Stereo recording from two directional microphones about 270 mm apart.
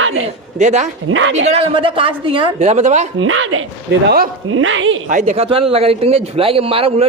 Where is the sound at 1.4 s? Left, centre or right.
Right.